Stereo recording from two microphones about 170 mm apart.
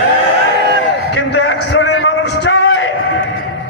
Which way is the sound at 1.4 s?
90° left.